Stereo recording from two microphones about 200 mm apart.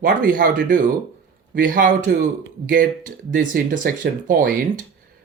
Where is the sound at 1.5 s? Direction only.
45° right (ahead or behind).